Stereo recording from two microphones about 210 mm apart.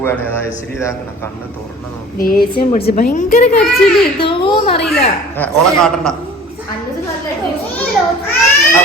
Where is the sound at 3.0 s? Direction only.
35° left (ahead or behind).